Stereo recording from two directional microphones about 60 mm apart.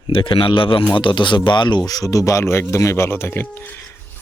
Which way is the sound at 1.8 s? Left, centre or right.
Left.